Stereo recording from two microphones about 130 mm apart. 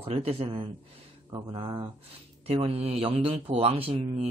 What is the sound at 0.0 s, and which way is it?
Speech, 50° right (ahead or behind).